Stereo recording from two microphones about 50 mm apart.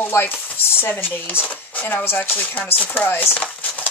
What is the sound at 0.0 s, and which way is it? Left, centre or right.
Speech, left.